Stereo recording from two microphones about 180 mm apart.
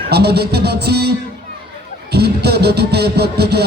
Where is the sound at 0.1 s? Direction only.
65° right (ahead or behind).